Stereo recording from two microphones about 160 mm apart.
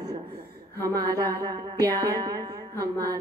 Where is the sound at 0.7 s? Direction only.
20° right (ahead or behind).